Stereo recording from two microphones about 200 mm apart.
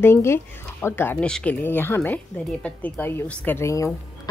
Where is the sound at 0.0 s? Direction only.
15° left (ahead or behind).